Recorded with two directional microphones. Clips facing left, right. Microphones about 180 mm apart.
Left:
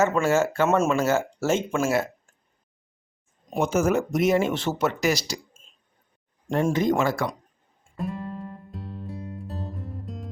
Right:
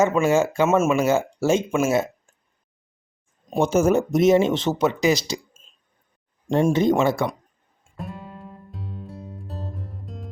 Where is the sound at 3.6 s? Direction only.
30° right (ahead or behind).